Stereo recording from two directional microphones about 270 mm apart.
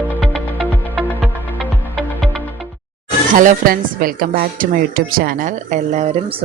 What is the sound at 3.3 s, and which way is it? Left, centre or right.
Speech, right.